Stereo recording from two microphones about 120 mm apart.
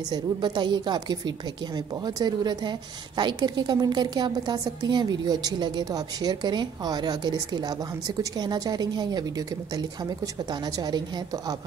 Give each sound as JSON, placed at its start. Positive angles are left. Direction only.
{"t": 0.1, "sound": "a woman's voice", "side_deg": -40}